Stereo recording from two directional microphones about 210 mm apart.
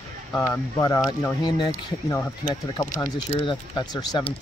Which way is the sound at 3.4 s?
20° left (ahead or behind).